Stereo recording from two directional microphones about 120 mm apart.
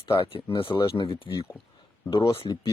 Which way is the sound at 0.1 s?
50° left (ahead or behind).